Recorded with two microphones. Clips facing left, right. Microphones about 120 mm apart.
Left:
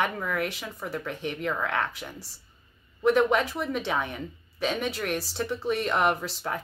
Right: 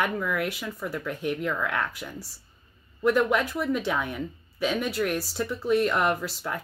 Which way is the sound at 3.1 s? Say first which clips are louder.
Left 1 dB; centre (ahead or behind).